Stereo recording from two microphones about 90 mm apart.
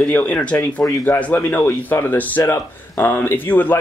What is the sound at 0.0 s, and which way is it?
Speech, 15° left (ahead or behind).